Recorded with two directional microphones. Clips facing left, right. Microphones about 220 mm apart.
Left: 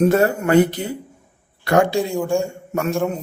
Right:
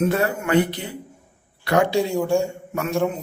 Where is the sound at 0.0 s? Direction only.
40° left (ahead or behind).